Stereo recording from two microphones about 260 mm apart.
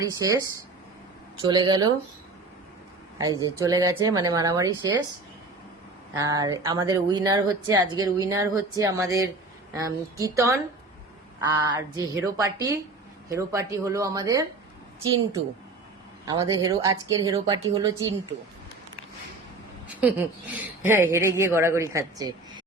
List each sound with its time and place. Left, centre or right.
0.0 s speech: centre
3.2 s speech: centre
6.1 s speech: centre
16.2 s speech: centre
20.0 s speech: centre